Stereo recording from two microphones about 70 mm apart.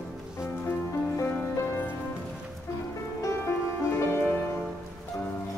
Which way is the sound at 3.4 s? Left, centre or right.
Left.